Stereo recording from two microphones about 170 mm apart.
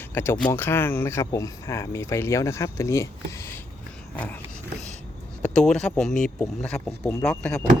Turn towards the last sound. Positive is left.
turn(degrees=5)  # may be behind; listen again after turning